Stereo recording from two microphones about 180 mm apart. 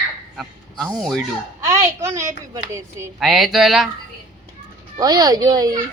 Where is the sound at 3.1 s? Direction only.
Centre (ahead or behind).